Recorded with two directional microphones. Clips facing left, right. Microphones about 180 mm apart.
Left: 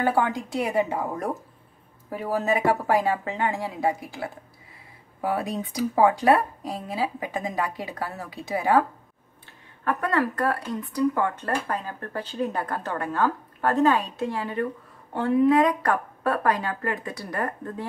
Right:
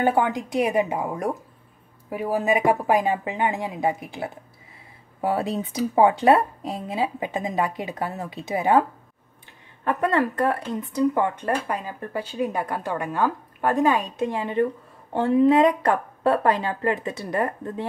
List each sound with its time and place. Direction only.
0.0 s speech: 20° right (ahead or behind)
9.8 s speech: 20° right (ahead or behind)